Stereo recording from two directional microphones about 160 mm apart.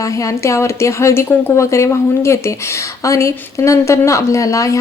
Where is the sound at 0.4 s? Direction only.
20° left (ahead or behind).